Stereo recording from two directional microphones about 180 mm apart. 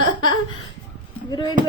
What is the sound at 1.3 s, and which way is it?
Speech, 20° left (ahead or behind).